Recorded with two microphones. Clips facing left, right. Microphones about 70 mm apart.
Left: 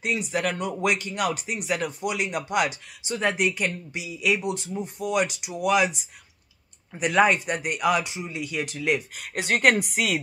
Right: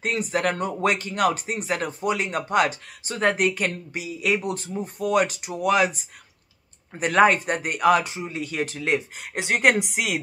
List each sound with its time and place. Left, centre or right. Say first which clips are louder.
0.0 s speech: right 2 dB; right; by 10.1 s centre